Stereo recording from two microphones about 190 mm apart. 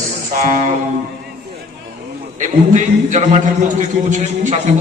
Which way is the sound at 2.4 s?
40° right (ahead or behind).